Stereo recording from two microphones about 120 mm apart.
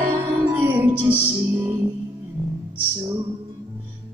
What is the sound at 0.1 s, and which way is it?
Music, 20° right (ahead or behind).